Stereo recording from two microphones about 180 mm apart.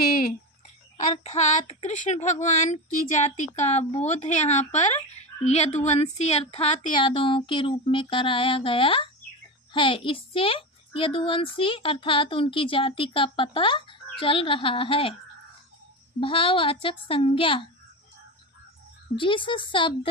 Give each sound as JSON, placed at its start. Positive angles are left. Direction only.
{"t": 1.2, "sound": "a child's voice", "side_deg": 35}
{"t": 16.2, "sound": "a child's voice", "side_deg": 30}
{"t": 19.1, "sound": "a child's voice", "side_deg": 25}